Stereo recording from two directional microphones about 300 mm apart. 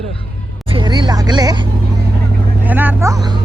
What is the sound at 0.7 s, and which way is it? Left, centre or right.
Music, centre.